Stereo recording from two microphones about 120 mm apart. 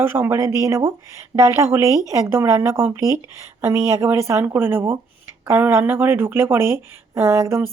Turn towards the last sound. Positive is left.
turn(degrees=-20)  # may be behind; listen again after turning